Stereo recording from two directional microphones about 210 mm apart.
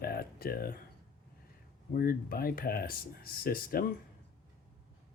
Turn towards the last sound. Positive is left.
turn(degrees=45)  # may be behind; listen again after turning